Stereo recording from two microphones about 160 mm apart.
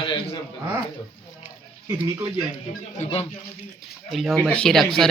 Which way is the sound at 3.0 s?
35° left (ahead or behind).